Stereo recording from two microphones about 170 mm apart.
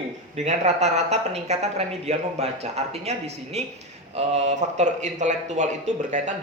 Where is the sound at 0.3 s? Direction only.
40° right (ahead or behind).